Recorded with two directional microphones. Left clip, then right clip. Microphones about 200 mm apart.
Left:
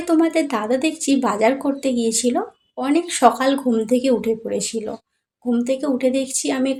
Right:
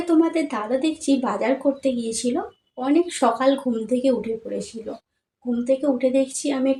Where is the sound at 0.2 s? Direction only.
55° left (ahead or behind).